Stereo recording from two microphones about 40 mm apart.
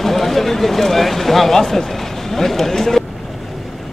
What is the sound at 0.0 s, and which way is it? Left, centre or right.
Speech, centre.